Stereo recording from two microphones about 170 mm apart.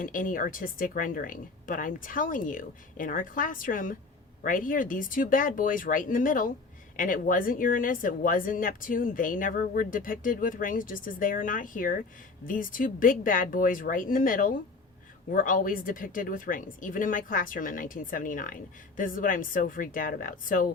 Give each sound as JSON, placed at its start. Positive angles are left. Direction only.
{"t": 0.0, "sound": "speech", "side_deg": 50}